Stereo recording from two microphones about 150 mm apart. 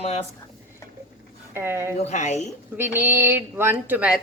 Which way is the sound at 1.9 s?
50° left (ahead or behind).